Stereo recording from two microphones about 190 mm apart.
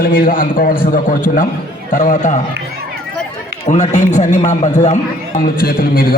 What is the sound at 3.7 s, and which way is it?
A man's voice, 40° left (ahead or behind).